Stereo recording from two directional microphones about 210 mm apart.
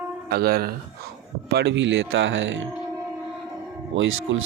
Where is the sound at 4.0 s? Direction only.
65° right (ahead or behind).